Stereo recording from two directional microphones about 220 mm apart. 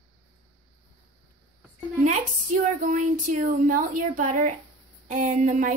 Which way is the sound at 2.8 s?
35° right (ahead or behind).